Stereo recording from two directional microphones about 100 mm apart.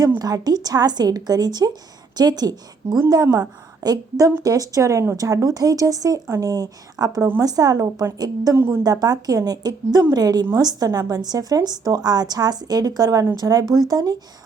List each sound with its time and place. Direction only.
0.2 s a woman's voice: 40° right (ahead or behind)
8.5 s speech: 25° right (ahead or behind)
8.8 s a woman's voice: 40° right (ahead or behind)